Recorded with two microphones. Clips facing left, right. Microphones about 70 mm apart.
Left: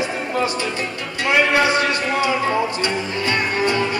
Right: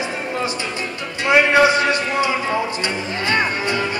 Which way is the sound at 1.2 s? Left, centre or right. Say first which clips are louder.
Right 3 dB; right.